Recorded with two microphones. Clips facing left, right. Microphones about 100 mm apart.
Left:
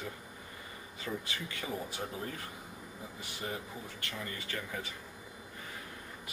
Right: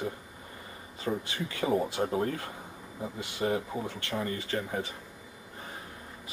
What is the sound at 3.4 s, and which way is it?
Speech, 55° right (ahead or behind).